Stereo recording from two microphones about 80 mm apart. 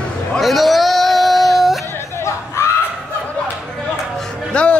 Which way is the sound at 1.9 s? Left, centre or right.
Left.